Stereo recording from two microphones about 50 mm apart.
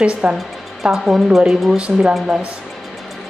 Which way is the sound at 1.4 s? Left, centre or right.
Centre.